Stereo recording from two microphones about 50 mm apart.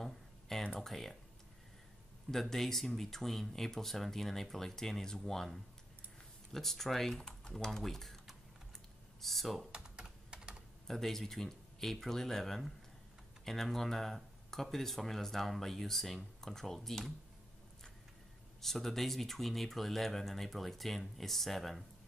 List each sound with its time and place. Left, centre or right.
0.0 s a sound: centre
0.7 s speech: centre
2.5 s speech: centre
9.2 s speech: centre
9.7 s computer keyboard: centre
10.9 s speech: centre
18.6 s speech: centre